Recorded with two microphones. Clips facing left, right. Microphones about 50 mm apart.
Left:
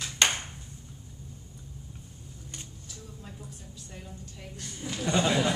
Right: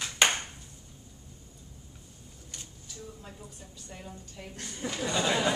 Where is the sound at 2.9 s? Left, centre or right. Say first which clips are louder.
Right 4 dB; centre.